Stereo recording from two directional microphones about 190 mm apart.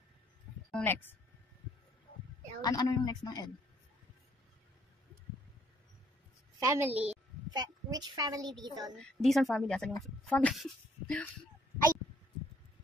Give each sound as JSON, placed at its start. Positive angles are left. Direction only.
{"t": 0.7, "sound": "speech", "side_deg": 5}
{"t": 2.6, "sound": "speech", "side_deg": 20}
{"t": 6.6, "sound": "a woman's voice", "side_deg": -15}
{"t": 7.5, "sound": "a child's voice", "side_deg": -20}
{"t": 9.2, "sound": "speech", "side_deg": 0}